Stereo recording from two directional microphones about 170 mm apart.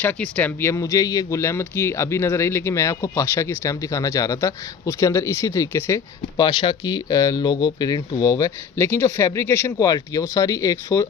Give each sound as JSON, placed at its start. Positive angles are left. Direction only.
{"t": 0.0, "sound": "speech", "side_deg": 10}